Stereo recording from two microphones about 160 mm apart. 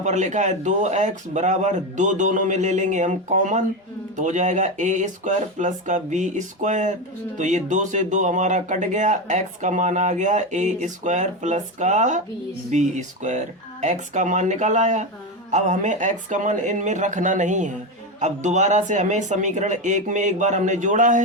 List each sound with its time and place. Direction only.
0.0 s speech: 50° right (ahead or behind)